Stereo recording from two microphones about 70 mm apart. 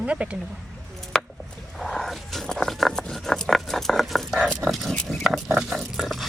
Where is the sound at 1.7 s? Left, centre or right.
Centre.